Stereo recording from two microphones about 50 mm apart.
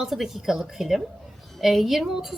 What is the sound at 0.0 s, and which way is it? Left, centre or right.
A woman's voice, centre.